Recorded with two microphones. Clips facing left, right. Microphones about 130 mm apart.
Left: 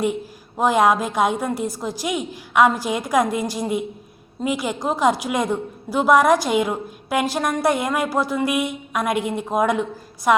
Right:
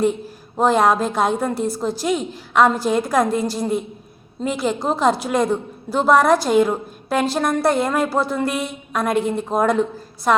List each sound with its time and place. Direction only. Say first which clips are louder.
0.6 s a woman's voice: right 1 dB; 15° left (ahead or behind)